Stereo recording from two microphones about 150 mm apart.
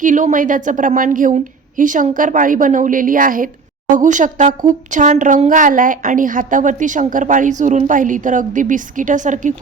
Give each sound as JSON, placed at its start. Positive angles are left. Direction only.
{"t": 0.0, "sound": "speech", "side_deg": -60}